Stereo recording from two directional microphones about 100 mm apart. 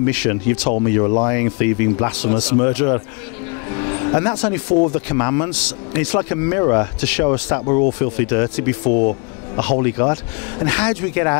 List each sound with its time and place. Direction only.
0.0 s a man's voice: 15° left (ahead or behind)